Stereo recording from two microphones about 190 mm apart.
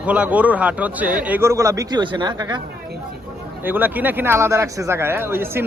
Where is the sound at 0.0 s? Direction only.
5° right (ahead or behind); by 2.6 s 25° right (ahead or behind).